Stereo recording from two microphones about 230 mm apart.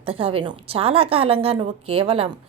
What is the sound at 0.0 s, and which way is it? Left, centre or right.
A woman's voice, right.